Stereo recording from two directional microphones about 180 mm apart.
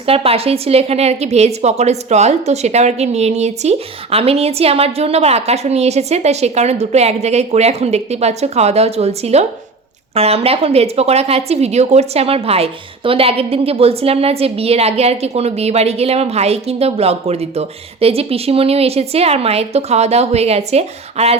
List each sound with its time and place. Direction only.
0.0 s speech: 35° right (ahead or behind)